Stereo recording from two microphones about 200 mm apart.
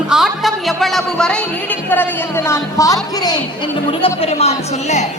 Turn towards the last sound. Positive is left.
turn(degrees=30)  # may be behind; listen again after turning